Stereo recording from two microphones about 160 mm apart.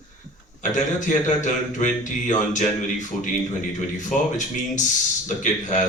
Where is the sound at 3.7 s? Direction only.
50° left (ahead or behind).